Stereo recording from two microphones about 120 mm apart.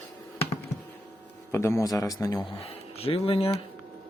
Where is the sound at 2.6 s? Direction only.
50° left (ahead or behind).